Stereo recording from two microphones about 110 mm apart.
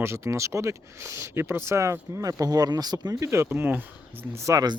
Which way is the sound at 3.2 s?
25° right (ahead or behind).